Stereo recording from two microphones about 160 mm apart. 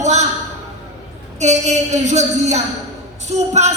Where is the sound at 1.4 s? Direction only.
45° right (ahead or behind).